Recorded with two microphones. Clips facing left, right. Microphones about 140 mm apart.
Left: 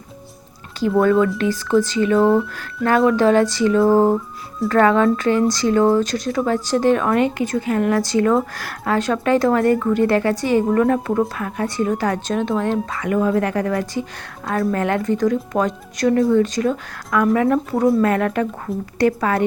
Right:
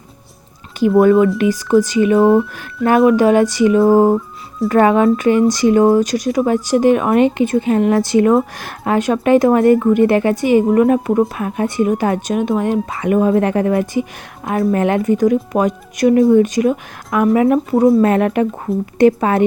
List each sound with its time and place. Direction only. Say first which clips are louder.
0.8 s speech: right 5 dB; 15° right (ahead or behind)